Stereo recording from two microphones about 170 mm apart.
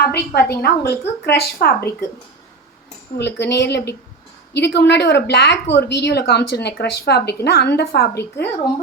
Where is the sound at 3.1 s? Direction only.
90° left; by 8.2 s 70° left (ahead or behind).